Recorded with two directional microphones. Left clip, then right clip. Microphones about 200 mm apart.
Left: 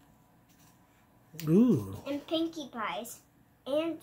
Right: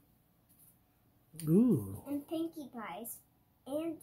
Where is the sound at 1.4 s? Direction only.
Centre (ahead or behind).